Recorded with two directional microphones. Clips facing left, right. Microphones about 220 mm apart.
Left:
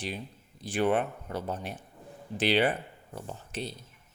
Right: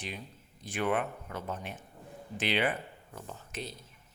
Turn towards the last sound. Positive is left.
turn(degrees=30)  # may be behind; listen again after turning